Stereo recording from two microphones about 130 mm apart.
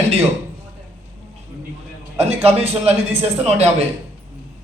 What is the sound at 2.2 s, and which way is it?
Speech, 55° right (ahead or behind).